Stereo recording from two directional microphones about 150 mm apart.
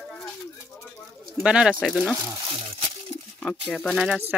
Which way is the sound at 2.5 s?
35° right (ahead or behind).